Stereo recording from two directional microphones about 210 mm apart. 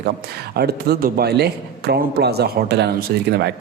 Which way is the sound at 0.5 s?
50° right (ahead or behind).